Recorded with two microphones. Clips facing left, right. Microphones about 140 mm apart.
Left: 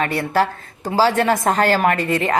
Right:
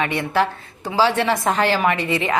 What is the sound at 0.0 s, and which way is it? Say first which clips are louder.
A woman's voice: left 1 dB; 40° left (ahead or behind).